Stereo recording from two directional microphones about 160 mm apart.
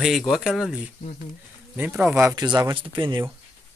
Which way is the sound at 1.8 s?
10° right (ahead or behind).